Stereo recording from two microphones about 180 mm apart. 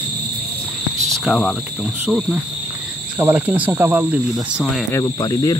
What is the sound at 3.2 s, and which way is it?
Speech, 10° right (ahead or behind).